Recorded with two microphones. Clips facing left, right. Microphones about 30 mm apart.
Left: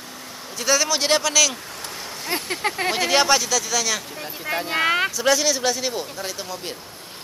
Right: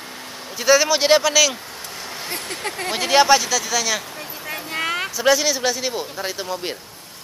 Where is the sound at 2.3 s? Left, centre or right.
Centre.